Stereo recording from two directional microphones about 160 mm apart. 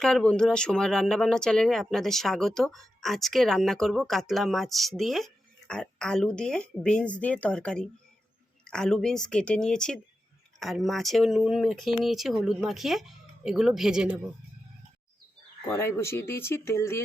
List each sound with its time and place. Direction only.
0.0 s speech: 5° left (ahead or behind)
15.7 s speech: 15° left (ahead or behind)